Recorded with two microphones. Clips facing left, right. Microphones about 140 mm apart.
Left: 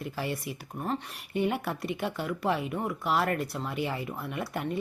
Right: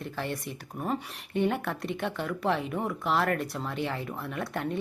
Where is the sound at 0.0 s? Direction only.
5° left (ahead or behind).